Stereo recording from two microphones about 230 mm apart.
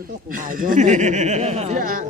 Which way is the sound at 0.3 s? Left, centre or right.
Right.